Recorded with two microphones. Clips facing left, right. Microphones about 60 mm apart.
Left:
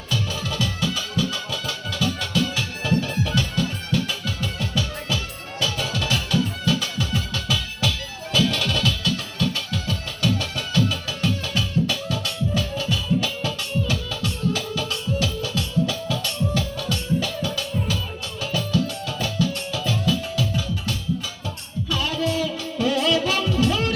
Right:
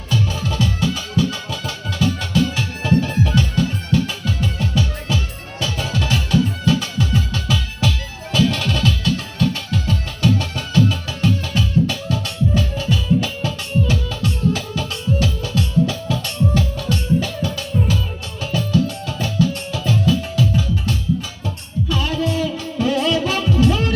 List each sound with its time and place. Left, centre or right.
0.1 s music: right
21.8 s music: right